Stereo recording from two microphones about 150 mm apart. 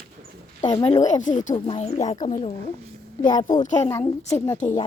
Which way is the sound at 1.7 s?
45° left (ahead or behind).